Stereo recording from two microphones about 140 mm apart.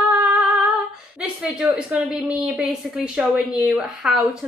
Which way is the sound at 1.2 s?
5° right (ahead or behind).